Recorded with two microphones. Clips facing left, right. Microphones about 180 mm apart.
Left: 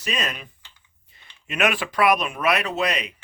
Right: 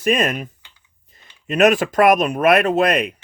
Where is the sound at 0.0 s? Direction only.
50° right (ahead or behind).